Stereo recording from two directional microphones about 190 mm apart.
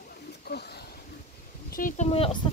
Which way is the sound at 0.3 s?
60° left (ahead or behind).